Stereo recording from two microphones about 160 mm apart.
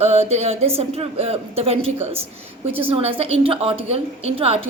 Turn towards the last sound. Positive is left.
turn(degrees=-40)  # may be behind; listen again after turning